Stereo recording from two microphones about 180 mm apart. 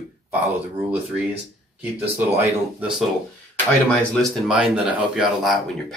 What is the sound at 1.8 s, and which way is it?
Speech, 10° right (ahead or behind).